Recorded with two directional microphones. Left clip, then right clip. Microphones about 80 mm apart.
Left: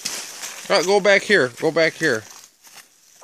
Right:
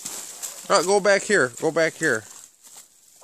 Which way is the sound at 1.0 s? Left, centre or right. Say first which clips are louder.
Left 3 dB; centre.